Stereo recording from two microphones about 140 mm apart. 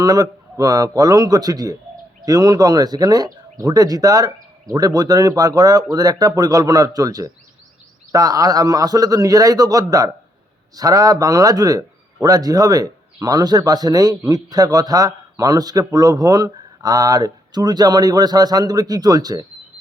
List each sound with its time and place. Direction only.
0.0 s a man's voice: 25° right (ahead or behind)